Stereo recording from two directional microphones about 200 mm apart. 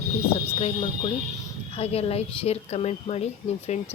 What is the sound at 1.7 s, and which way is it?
Speech, 30° left (ahead or behind).